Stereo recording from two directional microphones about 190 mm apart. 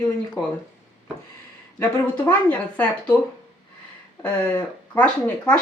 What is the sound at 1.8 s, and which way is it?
Speech, 10° left (ahead or behind).